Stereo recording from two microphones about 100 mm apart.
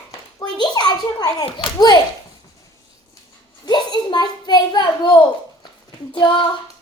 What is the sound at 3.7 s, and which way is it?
A child's voice, 45° left (ahead or behind).